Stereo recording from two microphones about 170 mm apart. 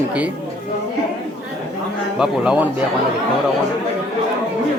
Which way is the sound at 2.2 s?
5° right (ahead or behind).